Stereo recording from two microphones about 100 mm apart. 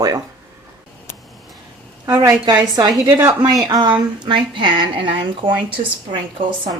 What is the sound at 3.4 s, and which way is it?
A woman's voice, 40° right (ahead or behind).